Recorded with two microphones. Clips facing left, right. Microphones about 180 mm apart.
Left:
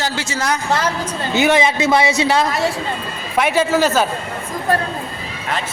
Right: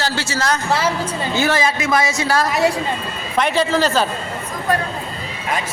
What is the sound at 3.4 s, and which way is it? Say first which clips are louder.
Speech: left 2 dB; 10° left (ahead or behind).